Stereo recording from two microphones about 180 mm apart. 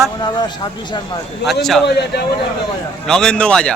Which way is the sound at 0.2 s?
25° left (ahead or behind).